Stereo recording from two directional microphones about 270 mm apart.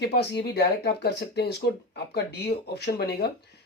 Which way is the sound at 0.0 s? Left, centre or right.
Left.